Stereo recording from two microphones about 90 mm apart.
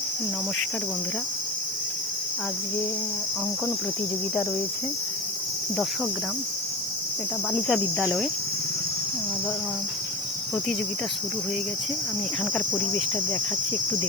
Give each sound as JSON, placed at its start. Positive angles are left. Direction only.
{"t": 7.7, "sound": "cricket", "side_deg": 0}
{"t": 12.5, "sound": "cricket", "side_deg": 10}